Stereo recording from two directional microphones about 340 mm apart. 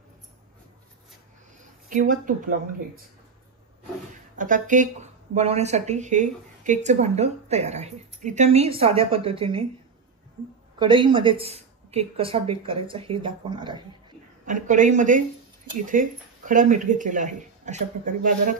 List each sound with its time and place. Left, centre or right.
1.9 s speech: right
4.1 s speech: right
10.8 s speech: centre